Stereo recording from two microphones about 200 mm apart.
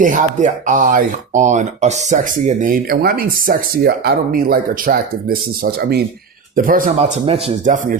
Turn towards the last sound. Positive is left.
turn(degrees=-40)  # may be behind; listen again after turning